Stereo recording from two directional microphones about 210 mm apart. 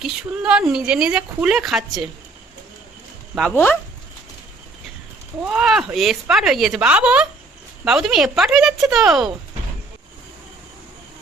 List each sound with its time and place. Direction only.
0.0 s speech: 5° right (ahead or behind)
3.5 s speech: 10° left (ahead or behind)
5.4 s speech: 5° right (ahead or behind)